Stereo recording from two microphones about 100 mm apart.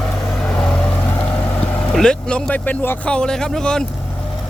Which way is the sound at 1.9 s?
10° left (ahead or behind).